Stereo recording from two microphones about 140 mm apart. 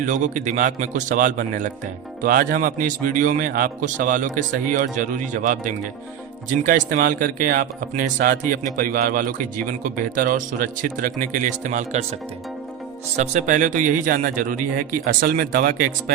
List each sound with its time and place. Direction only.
0.0 s a man's voice: 65° right (ahead or behind)
2.2 s a man's voice: 85° right; by 12.0 s 60° right (ahead or behind)
13.1 s a man's voice: 60° right (ahead or behind); by 14.6 s 80° right
15.0 s speech: 90° right